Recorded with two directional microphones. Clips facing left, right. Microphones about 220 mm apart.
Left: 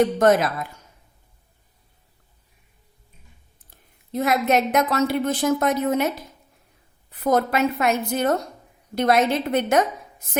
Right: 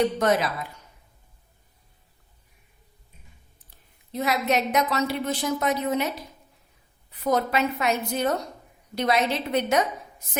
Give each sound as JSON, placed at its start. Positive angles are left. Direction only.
{"t": 0.0, "sound": "a woman's voice", "side_deg": 50}
{"t": 4.1, "sound": "a woman's voice", "side_deg": 50}
{"t": 7.1, "sound": "a woman's voice", "side_deg": 50}